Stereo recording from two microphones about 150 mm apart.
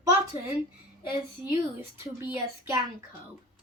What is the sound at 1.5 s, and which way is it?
Speech, 15° right (ahead or behind).